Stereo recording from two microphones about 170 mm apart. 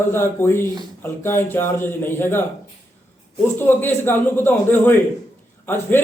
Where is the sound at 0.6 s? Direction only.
25° right (ahead or behind).